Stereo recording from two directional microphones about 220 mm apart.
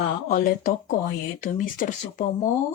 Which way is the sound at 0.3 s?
40° left (ahead or behind).